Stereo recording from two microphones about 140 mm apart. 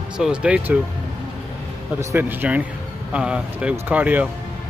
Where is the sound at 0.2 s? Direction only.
5° right (ahead or behind).